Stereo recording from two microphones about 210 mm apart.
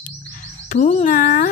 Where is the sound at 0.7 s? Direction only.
35° left (ahead or behind).